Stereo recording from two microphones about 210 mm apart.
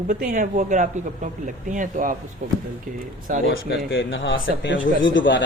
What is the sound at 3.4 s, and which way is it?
Speech, 65° left (ahead or behind).